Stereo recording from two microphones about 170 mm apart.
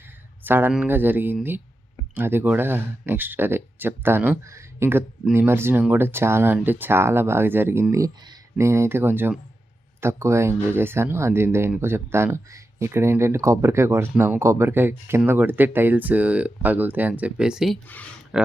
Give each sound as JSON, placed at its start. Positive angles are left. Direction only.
{"t": 0.4, "sound": "speech", "side_deg": -10}
{"t": 17.8, "sound": "speech", "side_deg": 10}
{"t": 18.3, "sound": "speech", "side_deg": -5}